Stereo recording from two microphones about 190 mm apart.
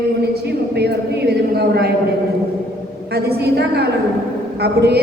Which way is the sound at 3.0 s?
60° right (ahead or behind).